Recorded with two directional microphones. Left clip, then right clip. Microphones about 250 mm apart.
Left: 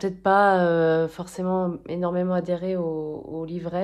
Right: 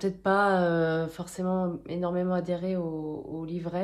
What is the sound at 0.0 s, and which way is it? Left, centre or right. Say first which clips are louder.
Speech: left 6 dB; left.